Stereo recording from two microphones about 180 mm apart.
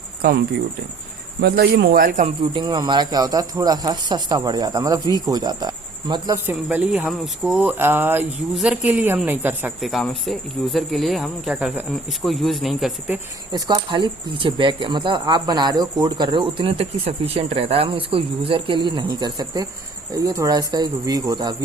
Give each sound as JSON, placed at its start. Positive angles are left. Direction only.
{"t": 1.4, "sound": "speech", "side_deg": -60}
{"t": 2.2, "sound": "speech", "side_deg": -30}
{"t": 13.5, "sound": "speech", "side_deg": -25}